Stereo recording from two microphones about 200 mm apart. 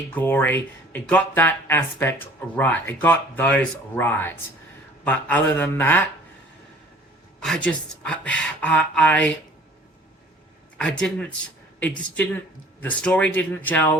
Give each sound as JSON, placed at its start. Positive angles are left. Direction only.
{"t": 0.1, "sound": "speech", "side_deg": 10}
{"t": 7.3, "sound": "speech", "side_deg": 0}
{"t": 10.8, "sound": "speech", "side_deg": 5}